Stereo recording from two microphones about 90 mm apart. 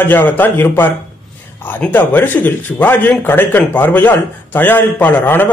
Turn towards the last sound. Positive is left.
turn(degrees=20)  # may be behind; listen again after turning